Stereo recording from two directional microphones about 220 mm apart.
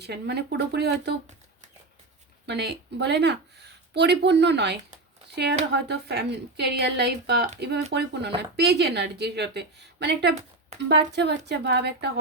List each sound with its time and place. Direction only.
0.0 s a woman's voice: 50° right (ahead or behind)
2.5 s a woman's voice: 50° right (ahead or behind)